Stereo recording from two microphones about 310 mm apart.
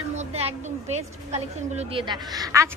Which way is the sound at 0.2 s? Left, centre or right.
Centre.